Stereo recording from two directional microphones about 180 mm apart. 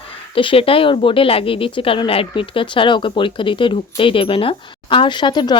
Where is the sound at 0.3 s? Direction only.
30° left (ahead or behind).